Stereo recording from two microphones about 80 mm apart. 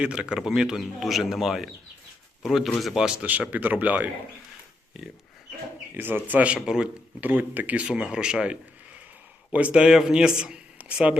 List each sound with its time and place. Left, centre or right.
0.0 s speech: centre
3.5 s speech: right
4.9 s speech: centre
5.9 s speech: right